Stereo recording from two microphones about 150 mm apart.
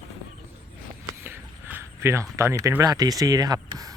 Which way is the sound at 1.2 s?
15° right (ahead or behind).